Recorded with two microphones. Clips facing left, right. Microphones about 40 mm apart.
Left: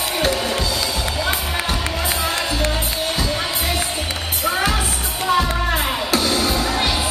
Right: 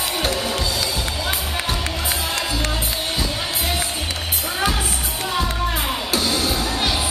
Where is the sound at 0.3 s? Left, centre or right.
Centre.